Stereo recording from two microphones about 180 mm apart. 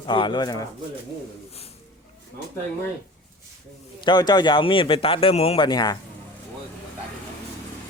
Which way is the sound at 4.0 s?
25° left (ahead or behind).